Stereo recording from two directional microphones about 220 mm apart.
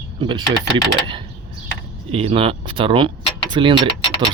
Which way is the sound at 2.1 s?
25° right (ahead or behind).